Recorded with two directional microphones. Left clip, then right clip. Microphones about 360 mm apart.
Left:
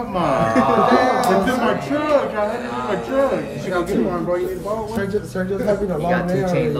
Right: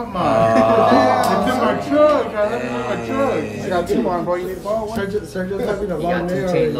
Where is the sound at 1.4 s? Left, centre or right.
Centre.